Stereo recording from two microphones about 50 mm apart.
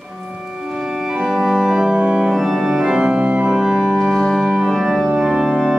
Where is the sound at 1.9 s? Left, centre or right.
Right.